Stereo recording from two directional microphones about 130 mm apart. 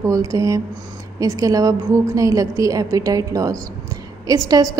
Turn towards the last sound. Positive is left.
turn(degrees=-30)  # may be behind; listen again after turning